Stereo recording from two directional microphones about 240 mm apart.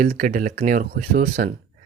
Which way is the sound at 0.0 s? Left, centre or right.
Right.